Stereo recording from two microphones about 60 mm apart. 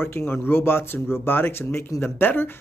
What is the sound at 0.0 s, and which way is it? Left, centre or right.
Speech, left.